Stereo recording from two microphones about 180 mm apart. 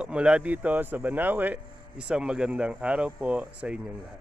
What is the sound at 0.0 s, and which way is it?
Speech, 5° right (ahead or behind).